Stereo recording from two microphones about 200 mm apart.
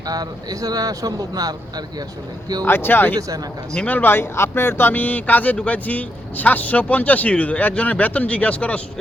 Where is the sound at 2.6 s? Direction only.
10° left (ahead or behind).